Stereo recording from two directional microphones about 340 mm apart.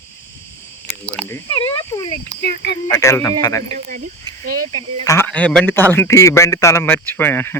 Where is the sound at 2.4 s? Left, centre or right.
Left.